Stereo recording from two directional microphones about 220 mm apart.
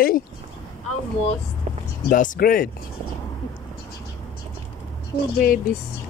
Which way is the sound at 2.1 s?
35° left (ahead or behind).